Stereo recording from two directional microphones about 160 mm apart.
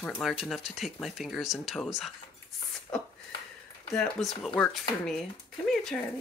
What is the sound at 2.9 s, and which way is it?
Speech, 15° left (ahead or behind).